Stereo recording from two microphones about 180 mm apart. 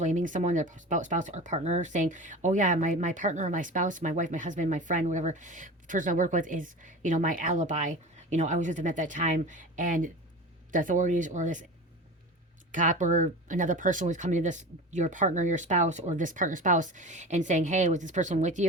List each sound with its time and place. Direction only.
0.0 s speech: 45° right (ahead or behind)
12.7 s speech: 45° right (ahead or behind)